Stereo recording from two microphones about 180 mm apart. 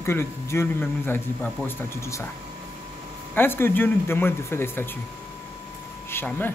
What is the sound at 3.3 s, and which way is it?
Speech, 10° left (ahead or behind).